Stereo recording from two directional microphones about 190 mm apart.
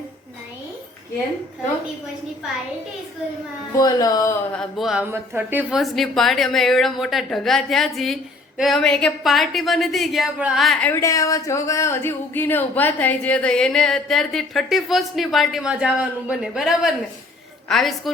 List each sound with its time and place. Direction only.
3.8 s speech: 20° left (ahead or behind)
4.5 s a woman's voice: centre (ahead or behind)
5.1 s a woman's voice: 10° right (ahead or behind)